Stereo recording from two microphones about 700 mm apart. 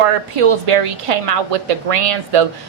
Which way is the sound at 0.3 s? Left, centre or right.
Right.